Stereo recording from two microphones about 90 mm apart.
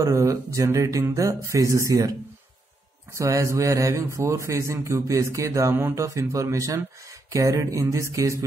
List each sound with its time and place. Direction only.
0.0 s speech: 35° right (ahead or behind)